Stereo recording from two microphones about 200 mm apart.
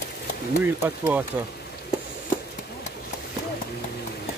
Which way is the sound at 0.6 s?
10° right (ahead or behind).